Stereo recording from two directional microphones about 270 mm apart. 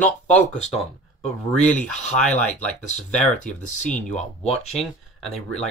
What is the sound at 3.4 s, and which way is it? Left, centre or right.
Speech, left.